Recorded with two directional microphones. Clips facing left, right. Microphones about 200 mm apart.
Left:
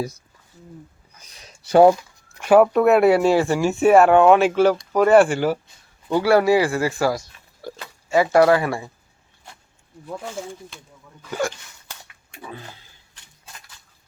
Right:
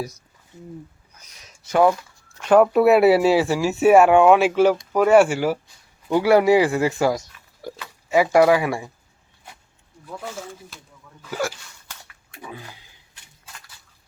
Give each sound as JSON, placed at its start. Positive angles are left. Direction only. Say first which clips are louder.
{"t": 1.2, "sound": "speech", "louder": "left 4 dB", "side_deg": 30}
{"t": 1.9, "sound": "speech", "louder": "left 5 dB", "side_deg": 10}
{"t": 2.7, "sound": "speech", "louder": "right 1 dB", "side_deg": -5}
{"t": 7.6, "sound": "pig", "louder": "even", "side_deg": -15}
{"t": 8.1, "sound": "speech", "louder": "even", "side_deg": -15}
{"t": 11.2, "sound": "speech", "louder": "left 1 dB", "side_deg": -5}
{"t": 12.4, "sound": "a sound", "louder": "left 1 dB", "side_deg": -15}